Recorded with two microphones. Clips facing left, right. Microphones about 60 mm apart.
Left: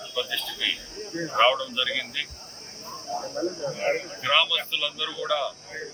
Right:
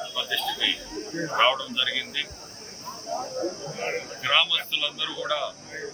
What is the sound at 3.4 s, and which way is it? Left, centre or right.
Speech, left.